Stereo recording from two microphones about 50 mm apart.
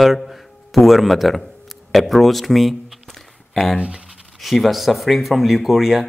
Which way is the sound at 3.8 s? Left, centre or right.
Centre.